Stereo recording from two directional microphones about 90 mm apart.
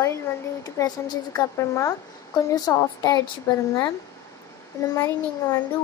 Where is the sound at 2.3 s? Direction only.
50° left (ahead or behind).